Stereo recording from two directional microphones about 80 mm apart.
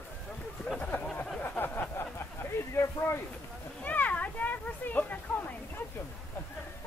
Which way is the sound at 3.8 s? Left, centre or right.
Left.